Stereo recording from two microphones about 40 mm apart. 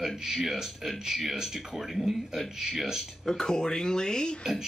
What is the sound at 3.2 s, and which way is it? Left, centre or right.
Speech, centre.